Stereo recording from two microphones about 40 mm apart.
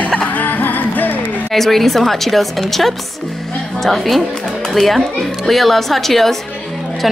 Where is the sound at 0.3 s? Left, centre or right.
Left.